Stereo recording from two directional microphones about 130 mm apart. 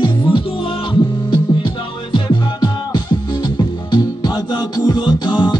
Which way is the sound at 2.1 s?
35° left (ahead or behind).